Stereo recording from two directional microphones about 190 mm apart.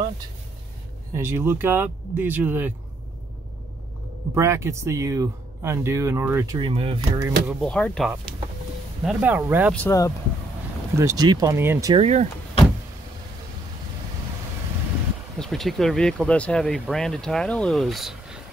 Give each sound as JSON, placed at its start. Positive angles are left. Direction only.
{"t": 1.1, "sound": "speech", "side_deg": -15}
{"t": 4.4, "sound": "speech", "side_deg": -15}
{"t": 7.2, "sound": "speech", "side_deg": -15}
{"t": 7.6, "sound": "speech", "side_deg": 5}
{"t": 9.0, "sound": "speech", "side_deg": -10}
{"t": 9.7, "sound": "speech", "side_deg": 10}
{"t": 11.0, "sound": "speech", "side_deg": -20}
{"t": 11.9, "sound": "speech", "side_deg": -35}
{"t": 15.3, "sound": "speech", "side_deg": 0}